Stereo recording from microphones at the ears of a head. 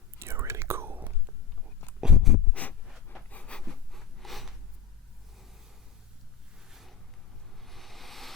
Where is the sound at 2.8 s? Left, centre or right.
Centre.